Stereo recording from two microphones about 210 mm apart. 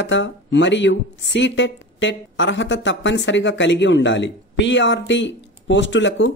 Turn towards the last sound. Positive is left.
turn(degrees=60)  # may be behind; listen again after turning